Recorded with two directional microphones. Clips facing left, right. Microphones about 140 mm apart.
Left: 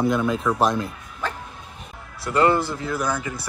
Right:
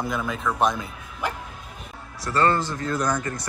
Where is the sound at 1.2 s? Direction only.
15° right (ahead or behind).